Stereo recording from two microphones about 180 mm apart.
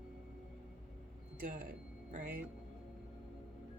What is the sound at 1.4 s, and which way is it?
A woman's voice, 50° right (ahead or behind).